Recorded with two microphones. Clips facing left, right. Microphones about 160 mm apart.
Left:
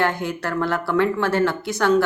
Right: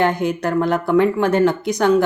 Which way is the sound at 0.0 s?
20° right (ahead or behind).